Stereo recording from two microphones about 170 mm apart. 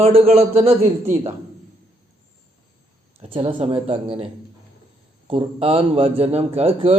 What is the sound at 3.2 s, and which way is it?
A man's voice, 35° right (ahead or behind).